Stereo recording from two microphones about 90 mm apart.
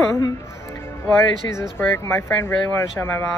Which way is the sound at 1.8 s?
25° left (ahead or behind).